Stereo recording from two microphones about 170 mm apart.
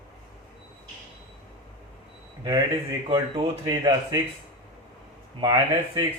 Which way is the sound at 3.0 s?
30° right (ahead or behind).